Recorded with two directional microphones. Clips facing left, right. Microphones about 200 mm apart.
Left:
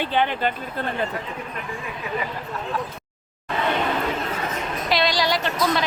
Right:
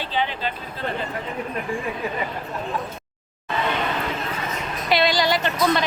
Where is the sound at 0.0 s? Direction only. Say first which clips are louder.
Left 4 dB; 55° left (ahead or behind).